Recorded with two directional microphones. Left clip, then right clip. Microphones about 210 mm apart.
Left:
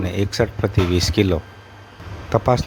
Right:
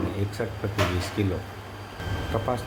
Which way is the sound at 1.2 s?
50° left (ahead or behind).